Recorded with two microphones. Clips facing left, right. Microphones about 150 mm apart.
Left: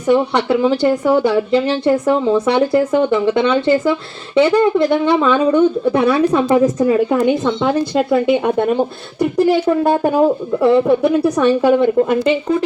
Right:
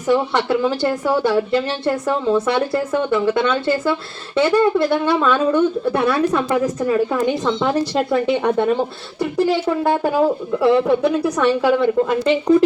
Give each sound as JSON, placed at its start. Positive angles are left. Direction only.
{"t": 0.9, "sound": "a woman's voice", "side_deg": 15}
{"t": 7.4, "sound": "speech", "side_deg": 5}